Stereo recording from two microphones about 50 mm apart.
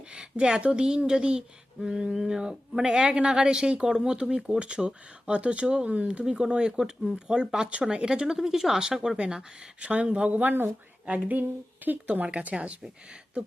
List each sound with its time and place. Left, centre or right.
0.1 s speech: centre
11.9 s speech: right